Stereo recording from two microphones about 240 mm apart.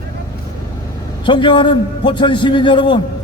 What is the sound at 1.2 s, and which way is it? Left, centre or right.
A man's voice, centre.